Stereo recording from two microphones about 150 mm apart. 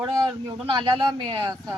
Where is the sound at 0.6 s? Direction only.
35° right (ahead or behind).